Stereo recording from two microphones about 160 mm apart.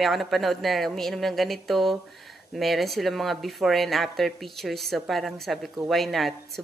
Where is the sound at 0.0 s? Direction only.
Centre (ahead or behind).